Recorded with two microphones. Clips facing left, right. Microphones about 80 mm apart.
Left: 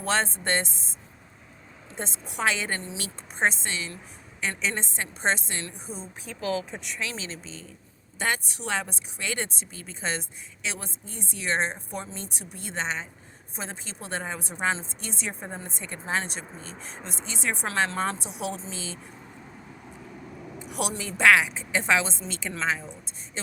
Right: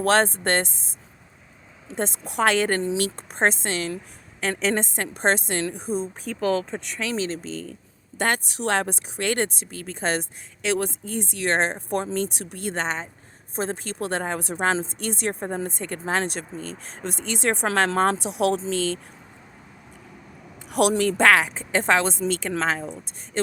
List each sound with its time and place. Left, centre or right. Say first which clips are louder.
0.0 s speech: right 7 dB; right
2.0 s a woman's voice: right 8 dB; right
6.3 s speech: right 8 dB; left
6.7 s speech: right 5 dB; centre
7.0 s a woman's voice: right 9 dB; right
8.2 s a woman's voice: right 5 dB; right
16.6 s speech: right 8 dB; left
16.8 s speech: right 7 dB; right
20.6 s a woman's voice: right 11 dB; right